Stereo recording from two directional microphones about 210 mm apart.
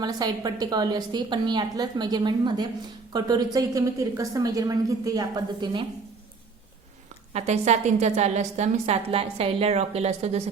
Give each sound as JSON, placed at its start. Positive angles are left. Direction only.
{"t": 0.0, "sound": "a woman's voice", "side_deg": -20}
{"t": 7.3, "sound": "a woman's voice", "side_deg": -30}